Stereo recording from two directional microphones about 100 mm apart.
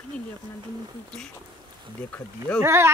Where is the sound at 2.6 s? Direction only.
25° right (ahead or behind).